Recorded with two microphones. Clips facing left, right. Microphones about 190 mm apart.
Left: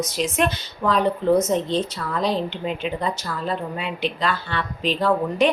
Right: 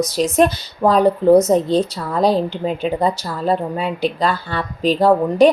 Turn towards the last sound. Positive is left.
turn(degrees=-35)  # may be behind; listen again after turning